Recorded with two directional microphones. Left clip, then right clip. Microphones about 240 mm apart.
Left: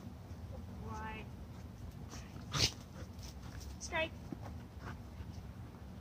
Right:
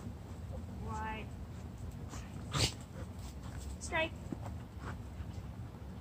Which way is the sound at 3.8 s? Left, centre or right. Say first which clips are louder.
Right 2 dB; centre.